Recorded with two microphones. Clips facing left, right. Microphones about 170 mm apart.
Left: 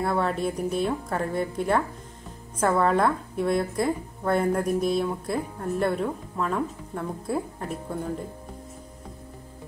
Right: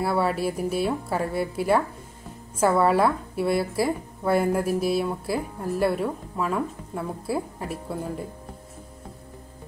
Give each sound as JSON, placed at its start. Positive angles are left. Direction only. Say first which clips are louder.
{"t": 0.0, "sound": "a woman's voice", "louder": "right 1 dB", "side_deg": -5}